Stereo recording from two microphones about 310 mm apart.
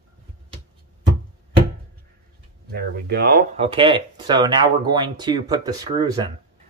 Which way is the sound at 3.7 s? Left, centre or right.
Centre.